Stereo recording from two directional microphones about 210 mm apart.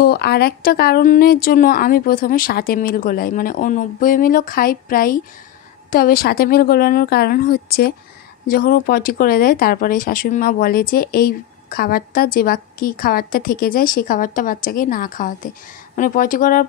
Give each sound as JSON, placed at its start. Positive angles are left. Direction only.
{"t": 0.0, "sound": "speech", "side_deg": 50}